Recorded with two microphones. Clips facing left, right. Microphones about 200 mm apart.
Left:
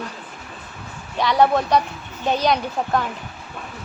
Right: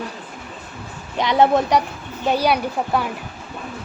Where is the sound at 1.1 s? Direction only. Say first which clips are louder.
Right 1 dB; 20° right (ahead or behind).